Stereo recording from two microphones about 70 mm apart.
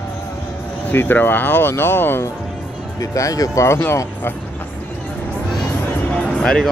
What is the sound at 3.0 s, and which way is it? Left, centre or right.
Speech, left.